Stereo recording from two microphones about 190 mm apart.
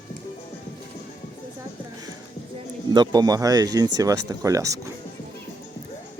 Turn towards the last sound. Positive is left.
turn(degrees=-15)  # may be behind; listen again after turning